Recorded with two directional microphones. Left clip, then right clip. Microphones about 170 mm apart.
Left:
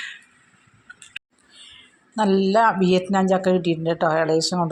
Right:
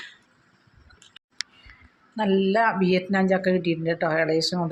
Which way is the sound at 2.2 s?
30° left (ahead or behind).